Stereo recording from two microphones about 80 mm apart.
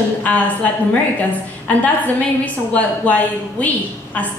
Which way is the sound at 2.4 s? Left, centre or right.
Centre.